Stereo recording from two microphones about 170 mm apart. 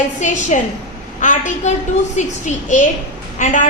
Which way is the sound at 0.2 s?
45° left (ahead or behind).